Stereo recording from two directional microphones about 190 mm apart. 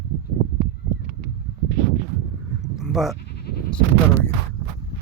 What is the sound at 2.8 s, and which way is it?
Goat, centre (ahead or behind).